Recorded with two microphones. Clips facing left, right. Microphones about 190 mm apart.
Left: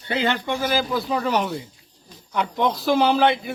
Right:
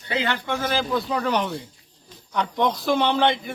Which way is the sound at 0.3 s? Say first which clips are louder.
Left 2 dB; 15° left (ahead or behind).